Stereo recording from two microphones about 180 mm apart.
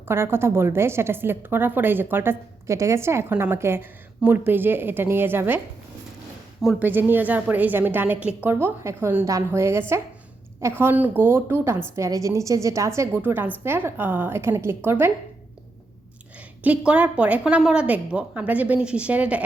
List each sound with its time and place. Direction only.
0.1 s a woman's voice: 15° right (ahead or behind)
6.6 s a woman's voice: 5° right (ahead or behind)
16.6 s a woman's voice: 5° right (ahead or behind)